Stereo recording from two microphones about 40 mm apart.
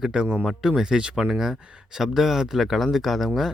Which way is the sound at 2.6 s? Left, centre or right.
Centre.